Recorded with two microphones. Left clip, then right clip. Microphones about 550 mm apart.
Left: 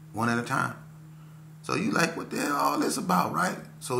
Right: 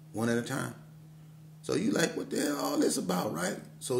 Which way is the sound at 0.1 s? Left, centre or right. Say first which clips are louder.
Left 4 dB; right.